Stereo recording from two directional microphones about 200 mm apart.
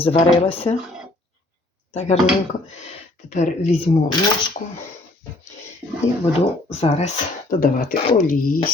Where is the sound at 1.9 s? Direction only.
35° left (ahead or behind).